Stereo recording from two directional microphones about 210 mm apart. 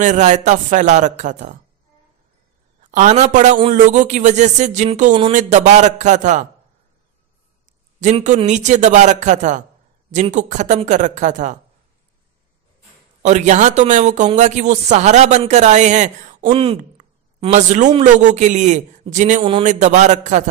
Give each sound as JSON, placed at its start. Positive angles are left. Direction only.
{"t": 0.0, "sound": "a man's voice", "side_deg": -35}
{"t": 2.8, "sound": "a man's voice", "side_deg": -35}
{"t": 7.6, "sound": "a man's voice", "side_deg": -35}
{"t": 13.2, "sound": "a man's voice", "side_deg": -35}